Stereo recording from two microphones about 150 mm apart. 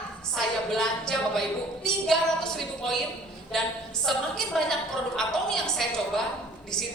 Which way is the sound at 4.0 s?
5° left (ahead or behind).